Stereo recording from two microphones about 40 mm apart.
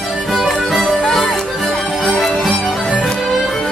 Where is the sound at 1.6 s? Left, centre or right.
Left.